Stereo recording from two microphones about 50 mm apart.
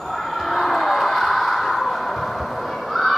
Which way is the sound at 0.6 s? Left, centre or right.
Centre.